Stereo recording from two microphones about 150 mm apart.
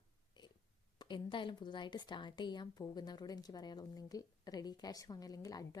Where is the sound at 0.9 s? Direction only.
30° left (ahead or behind).